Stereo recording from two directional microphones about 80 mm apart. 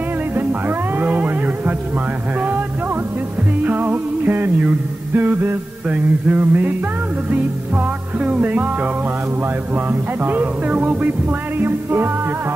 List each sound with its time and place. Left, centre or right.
0.4 s music: right
3.6 s music: right